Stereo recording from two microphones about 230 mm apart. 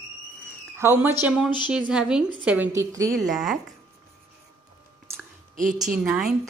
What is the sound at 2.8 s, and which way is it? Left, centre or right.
Speech, centre.